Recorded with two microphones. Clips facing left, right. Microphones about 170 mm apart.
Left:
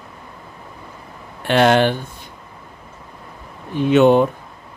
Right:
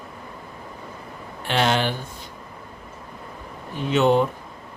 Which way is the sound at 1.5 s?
55° left (ahead or behind).